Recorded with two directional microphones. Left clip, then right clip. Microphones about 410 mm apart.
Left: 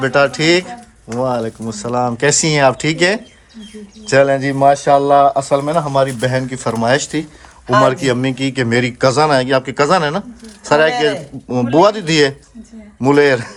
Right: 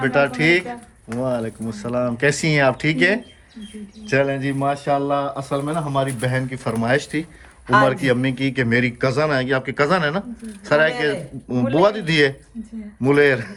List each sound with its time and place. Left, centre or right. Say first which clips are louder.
0.0 s speech: left 4 dB; centre